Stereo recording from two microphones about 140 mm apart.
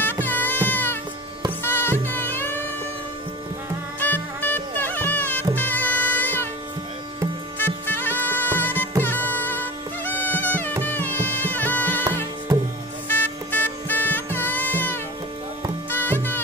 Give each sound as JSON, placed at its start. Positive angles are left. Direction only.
{"t": 0.0, "sound": "music", "side_deg": 15}
{"t": 4.0, "sound": "music", "side_deg": 10}
{"t": 7.5, "sound": "music", "side_deg": 15}
{"t": 12.5, "sound": "music", "side_deg": -30}
{"t": 13.1, "sound": "music", "side_deg": 15}